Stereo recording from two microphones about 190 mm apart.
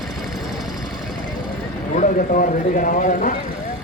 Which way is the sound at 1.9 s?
45° left (ahead or behind).